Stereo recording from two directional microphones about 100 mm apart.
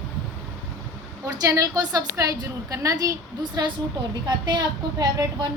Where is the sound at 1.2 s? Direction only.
35° right (ahead or behind).